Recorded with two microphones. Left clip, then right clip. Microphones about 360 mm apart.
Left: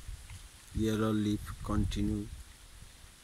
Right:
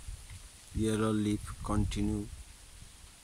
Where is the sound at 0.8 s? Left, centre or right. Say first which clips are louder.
Even; centre.